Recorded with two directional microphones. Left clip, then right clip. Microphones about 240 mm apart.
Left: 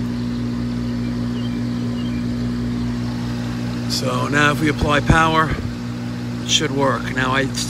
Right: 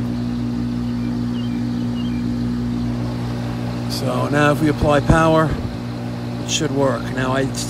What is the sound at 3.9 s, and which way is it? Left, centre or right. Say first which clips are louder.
Speech: left 1 dB; centre.